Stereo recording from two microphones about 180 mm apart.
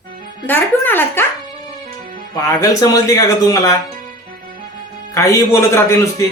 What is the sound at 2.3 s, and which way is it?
Speech, 20° left (ahead or behind).